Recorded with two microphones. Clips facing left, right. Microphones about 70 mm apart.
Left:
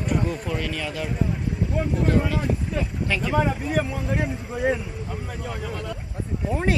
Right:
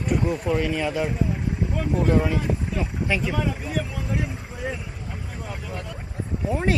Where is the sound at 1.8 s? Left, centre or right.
Centre.